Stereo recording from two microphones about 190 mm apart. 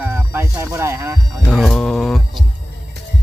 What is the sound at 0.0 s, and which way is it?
Music, 10° right (ahead or behind).